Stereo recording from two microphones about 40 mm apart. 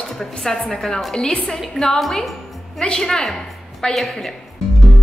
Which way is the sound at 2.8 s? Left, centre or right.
Centre.